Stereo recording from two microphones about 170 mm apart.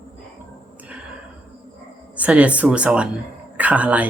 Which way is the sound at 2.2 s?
10° right (ahead or behind).